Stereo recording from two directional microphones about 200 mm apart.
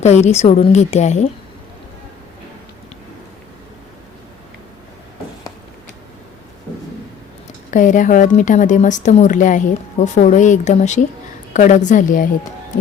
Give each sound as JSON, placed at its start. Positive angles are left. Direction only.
{"t": 0.0, "sound": "a woman's voice", "side_deg": 35}
{"t": 7.7, "sound": "a woman's voice", "side_deg": 40}